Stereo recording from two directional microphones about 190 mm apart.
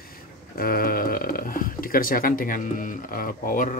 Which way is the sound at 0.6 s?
50° left (ahead or behind).